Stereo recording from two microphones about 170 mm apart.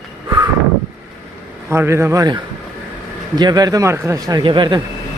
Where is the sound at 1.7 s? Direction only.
15° right (ahead or behind).